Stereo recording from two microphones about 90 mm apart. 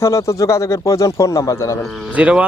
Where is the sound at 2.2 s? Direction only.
10° right (ahead or behind).